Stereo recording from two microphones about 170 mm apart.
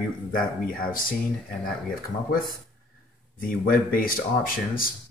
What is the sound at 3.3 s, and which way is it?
Speech, 55° left (ahead or behind).